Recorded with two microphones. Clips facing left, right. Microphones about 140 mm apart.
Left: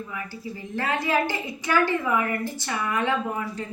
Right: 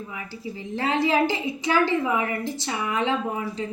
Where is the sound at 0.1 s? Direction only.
20° right (ahead or behind).